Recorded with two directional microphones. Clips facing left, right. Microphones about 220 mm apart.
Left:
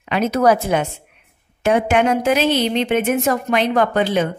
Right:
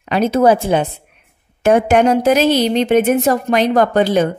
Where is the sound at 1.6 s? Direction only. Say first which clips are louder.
Right 4 dB; 45° right (ahead or behind).